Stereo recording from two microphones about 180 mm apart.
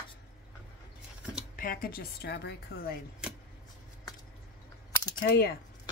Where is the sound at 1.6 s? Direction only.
50° left (ahead or behind).